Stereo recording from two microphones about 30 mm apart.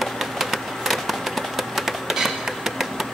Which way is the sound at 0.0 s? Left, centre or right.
Centre.